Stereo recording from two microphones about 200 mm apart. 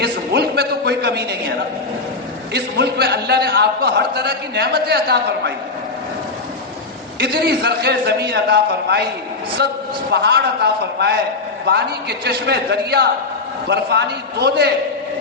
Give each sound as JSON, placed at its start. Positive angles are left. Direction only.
{"t": 0.0, "sound": "a sound", "side_deg": -55}
{"t": 2.5, "sound": "a man's voice", "side_deg": -55}
{"t": 7.2, "sound": "a man's voice", "side_deg": -55}